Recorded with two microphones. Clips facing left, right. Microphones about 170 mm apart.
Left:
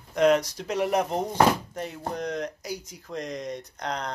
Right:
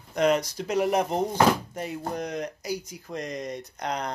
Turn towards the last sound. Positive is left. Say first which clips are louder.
# right 1 dB
turn(degrees=-5)  # may be behind; listen again after turning